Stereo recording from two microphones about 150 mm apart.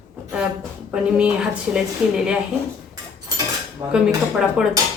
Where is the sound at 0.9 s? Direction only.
5° right (ahead or behind).